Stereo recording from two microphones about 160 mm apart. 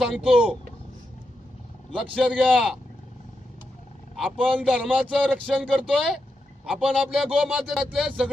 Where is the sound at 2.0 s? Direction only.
5° right (ahead or behind).